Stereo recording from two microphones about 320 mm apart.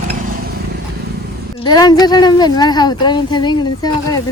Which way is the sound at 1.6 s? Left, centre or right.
Centre.